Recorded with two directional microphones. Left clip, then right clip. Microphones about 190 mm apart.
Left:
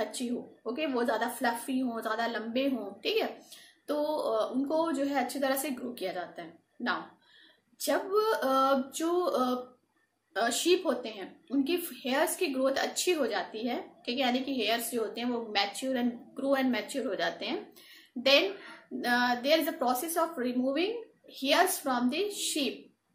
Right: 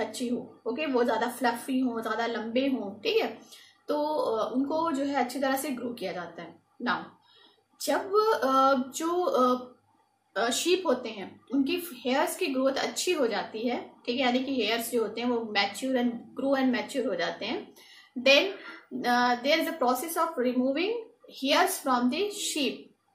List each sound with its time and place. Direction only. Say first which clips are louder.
0.7 s a woman's voice: right 3 dB; 20° left (ahead or behind)